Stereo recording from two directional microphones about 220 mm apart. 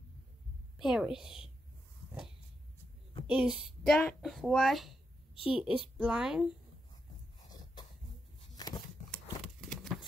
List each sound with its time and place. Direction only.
0.7 s speech: 5° right (ahead or behind)
3.3 s a woman's voice: 5° right (ahead or behind)
5.3 s a woman's voice: 25° left (ahead or behind)
5.6 s speech: 5° right (ahead or behind)
7.8 s dog: 20° left (ahead or behind)
8.5 s a sound: 15° left (ahead or behind)
9.1 s a sound: centre (ahead or behind)